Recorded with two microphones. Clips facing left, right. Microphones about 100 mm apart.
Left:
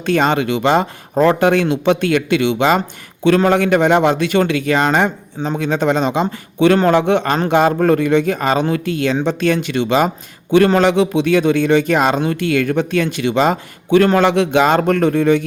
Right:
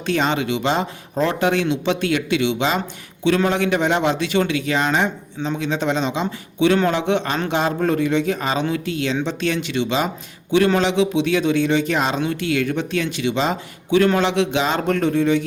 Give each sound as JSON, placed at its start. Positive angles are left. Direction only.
{"t": 0.0, "sound": "a man's voice", "side_deg": 50}